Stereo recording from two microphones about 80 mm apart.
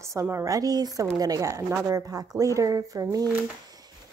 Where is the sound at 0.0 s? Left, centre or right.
Right.